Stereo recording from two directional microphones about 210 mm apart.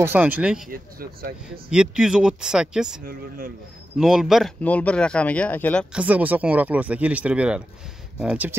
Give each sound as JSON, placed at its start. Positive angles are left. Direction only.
{"t": 0.0, "sound": "speech", "side_deg": -10}
{"t": 0.7, "sound": "speech", "side_deg": -45}
{"t": 1.7, "sound": "speech", "side_deg": -5}
{"t": 3.1, "sound": "speech", "side_deg": -45}
{"t": 4.0, "sound": "speech", "side_deg": 0}
{"t": 5.9, "sound": "speech", "side_deg": -5}